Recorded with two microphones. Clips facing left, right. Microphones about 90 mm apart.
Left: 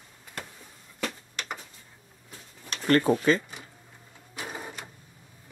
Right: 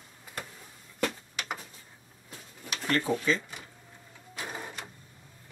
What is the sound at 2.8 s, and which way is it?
Speech, 55° left (ahead or behind).